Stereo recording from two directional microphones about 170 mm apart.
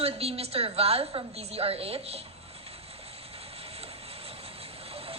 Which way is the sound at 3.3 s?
35° right (ahead or behind).